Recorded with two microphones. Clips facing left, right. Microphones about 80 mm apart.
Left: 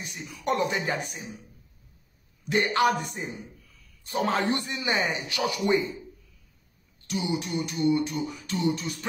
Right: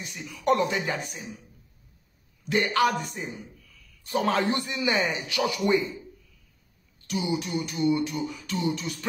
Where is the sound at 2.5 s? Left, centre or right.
Left.